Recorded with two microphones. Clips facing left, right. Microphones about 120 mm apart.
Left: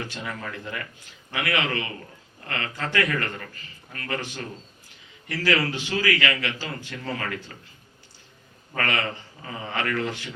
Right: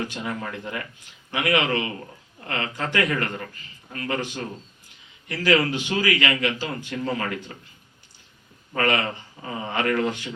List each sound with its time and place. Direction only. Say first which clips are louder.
0.0 s a man's voice: right 4 dB; 20° right (ahead or behind)
8.7 s a man's voice: right 4 dB; 20° right (ahead or behind)